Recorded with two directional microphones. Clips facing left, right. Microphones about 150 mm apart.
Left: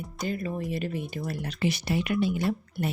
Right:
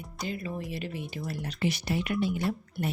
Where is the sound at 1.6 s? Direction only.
90° left.